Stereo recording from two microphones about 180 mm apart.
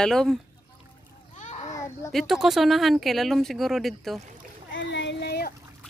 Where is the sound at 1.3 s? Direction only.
40° left (ahead or behind).